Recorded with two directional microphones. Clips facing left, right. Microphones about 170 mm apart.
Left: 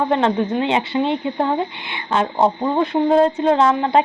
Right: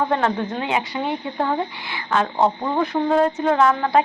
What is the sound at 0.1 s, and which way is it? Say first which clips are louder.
Speech: left 4 dB; 20° left (ahead or behind).